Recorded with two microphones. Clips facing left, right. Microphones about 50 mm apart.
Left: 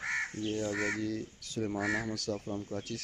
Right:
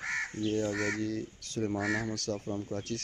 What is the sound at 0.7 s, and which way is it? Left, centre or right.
Speech, centre.